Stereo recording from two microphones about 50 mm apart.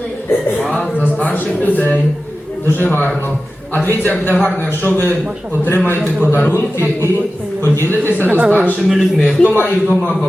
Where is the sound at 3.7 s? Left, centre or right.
Left.